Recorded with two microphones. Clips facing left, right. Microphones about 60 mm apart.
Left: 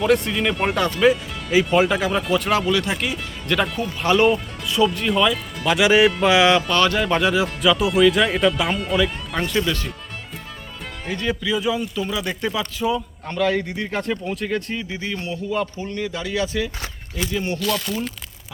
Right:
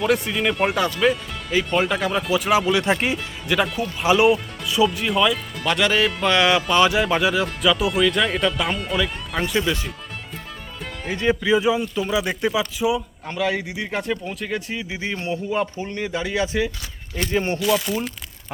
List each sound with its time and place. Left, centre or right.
0.0 s speech: centre
2.7 s speech: right
3.4 s speech: centre
11.2 s speech: right
17.2 s speech: right
17.6 s speech: centre